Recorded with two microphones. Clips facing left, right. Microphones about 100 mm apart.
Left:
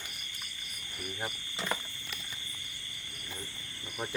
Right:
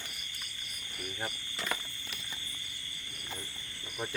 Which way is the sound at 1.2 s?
20° left (ahead or behind).